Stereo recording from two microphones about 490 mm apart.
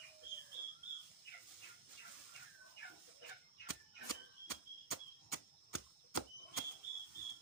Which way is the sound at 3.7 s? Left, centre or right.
Left.